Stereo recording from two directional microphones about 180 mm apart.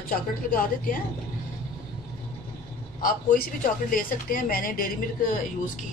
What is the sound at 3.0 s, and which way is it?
Speech, 50° left (ahead or behind).